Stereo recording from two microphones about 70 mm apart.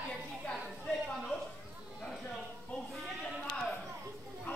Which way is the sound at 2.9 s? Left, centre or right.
Centre.